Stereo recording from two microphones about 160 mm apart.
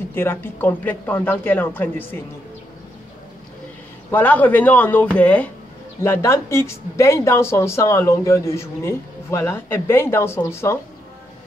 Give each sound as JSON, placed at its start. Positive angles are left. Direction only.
{"t": 0.1, "sound": "speech", "side_deg": 15}
{"t": 4.1, "sound": "speech", "side_deg": 10}